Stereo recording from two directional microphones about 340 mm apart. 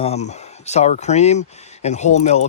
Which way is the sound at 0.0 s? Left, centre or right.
Centre.